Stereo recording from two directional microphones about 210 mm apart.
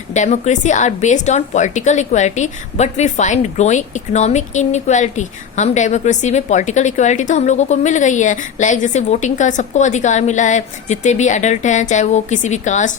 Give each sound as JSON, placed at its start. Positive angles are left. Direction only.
{"t": 0.1, "sound": "a woman's voice", "side_deg": 35}